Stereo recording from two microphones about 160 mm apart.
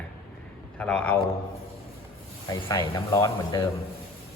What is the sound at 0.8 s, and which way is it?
Speech, 5° left (ahead or behind).